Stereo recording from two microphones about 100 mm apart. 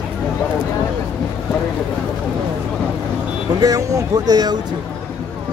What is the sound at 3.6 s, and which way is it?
Speech, 40° right (ahead or behind).